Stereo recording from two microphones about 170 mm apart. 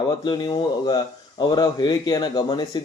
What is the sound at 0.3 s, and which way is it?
Speech, 25° left (ahead or behind).